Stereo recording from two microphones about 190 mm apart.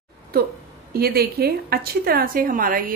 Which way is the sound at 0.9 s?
55° right (ahead or behind).